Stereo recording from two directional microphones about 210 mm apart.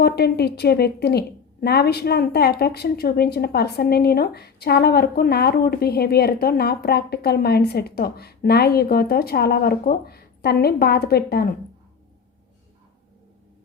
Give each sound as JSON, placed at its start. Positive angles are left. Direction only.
{"t": 0.0, "sound": "a woman's voice", "side_deg": 50}